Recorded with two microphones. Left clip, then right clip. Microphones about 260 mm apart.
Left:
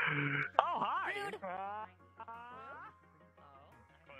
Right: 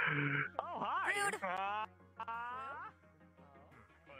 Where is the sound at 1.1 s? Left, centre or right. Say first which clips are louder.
Right 5 dB; right.